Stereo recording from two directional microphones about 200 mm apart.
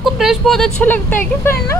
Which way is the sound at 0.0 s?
Centre (ahead or behind).